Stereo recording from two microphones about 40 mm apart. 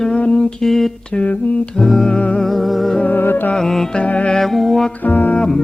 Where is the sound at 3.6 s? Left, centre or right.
Centre.